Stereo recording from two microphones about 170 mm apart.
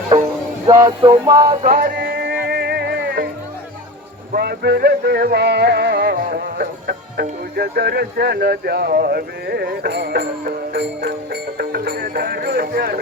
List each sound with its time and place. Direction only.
0.7 s music: 15° right (ahead or behind)
1.7 s music: 60° right (ahead or behind); by 3.2 s 75° right (ahead or behind)
4.4 s speech: 75° right (ahead or behind)
6.2 s speech: 65° right (ahead or behind)